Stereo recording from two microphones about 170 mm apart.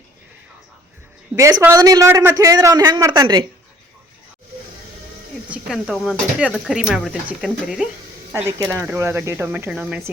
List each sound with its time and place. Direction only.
1.4 s a man's voice: 20° right (ahead or behind)
5.5 s speech: 5° right (ahead or behind)
8.7 s speech: 15° right (ahead or behind)